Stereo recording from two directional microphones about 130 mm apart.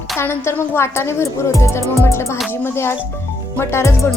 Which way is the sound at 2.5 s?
20° left (ahead or behind).